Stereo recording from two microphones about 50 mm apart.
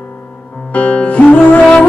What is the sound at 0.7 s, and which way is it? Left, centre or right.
Music, left.